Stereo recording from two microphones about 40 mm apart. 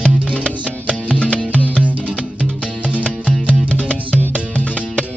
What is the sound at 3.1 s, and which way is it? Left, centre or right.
Music, left.